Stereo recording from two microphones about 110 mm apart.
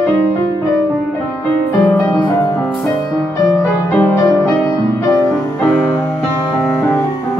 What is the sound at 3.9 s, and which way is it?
Music, 15° left (ahead or behind).